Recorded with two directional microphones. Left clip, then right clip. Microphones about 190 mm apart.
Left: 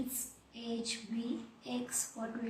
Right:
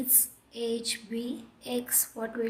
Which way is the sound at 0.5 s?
45° right (ahead or behind).